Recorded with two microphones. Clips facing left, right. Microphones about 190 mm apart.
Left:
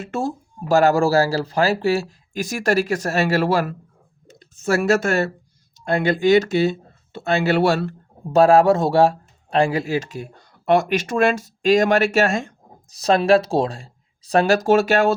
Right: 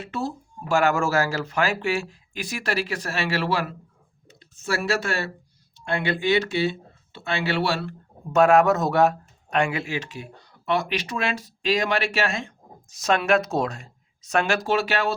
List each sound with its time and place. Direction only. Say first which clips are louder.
0.0 s speech: left 5 dB; 50° left (ahead or behind)
8.3 s speech: left 4 dB; 35° left (ahead or behind)